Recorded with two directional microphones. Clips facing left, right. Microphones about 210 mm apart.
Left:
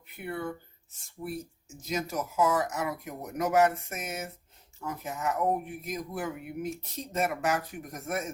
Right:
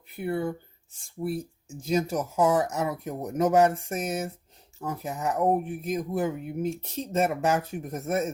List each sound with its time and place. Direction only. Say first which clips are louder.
0.3 s speech: right 6 dB; 30° right (ahead or behind)